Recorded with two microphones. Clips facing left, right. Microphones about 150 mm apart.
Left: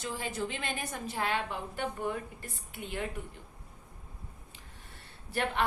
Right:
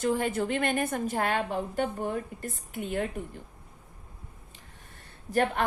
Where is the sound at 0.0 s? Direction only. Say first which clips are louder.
Right 8 dB; 55° right (ahead or behind).